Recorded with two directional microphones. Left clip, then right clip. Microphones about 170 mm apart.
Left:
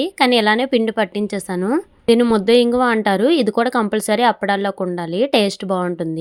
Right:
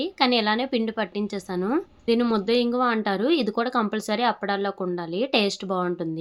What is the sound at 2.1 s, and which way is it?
Speech, 45° left (ahead or behind).